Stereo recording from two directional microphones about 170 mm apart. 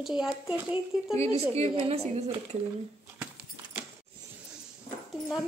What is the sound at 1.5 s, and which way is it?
Speech, 35° right (ahead or behind).